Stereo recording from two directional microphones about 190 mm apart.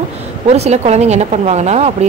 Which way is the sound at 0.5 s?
35° right (ahead or behind).